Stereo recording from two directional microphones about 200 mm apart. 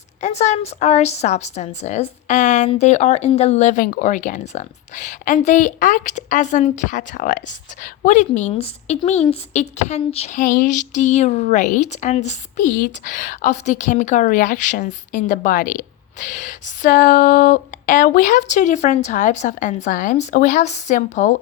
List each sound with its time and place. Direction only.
0.2 s female singing: 35° left (ahead or behind)